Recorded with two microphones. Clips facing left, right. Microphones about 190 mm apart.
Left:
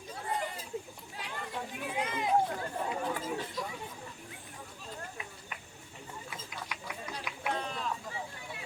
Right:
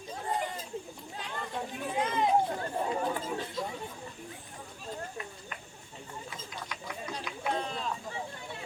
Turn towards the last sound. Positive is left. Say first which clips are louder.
# right 2 dB
turn(degrees=-25)  # may be behind; listen again after turning